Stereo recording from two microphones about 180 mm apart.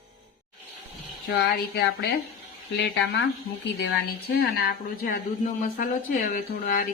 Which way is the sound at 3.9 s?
65° left (ahead or behind).